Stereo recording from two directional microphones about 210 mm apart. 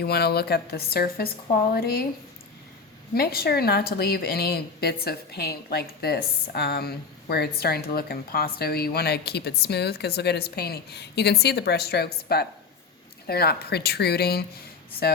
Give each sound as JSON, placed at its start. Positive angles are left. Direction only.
{"t": 0.0, "sound": "speech", "side_deg": 50}
{"t": 3.2, "sound": "speech", "side_deg": 45}